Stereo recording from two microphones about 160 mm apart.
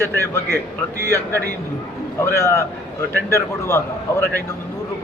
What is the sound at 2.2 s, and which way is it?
Speech, 15° left (ahead or behind).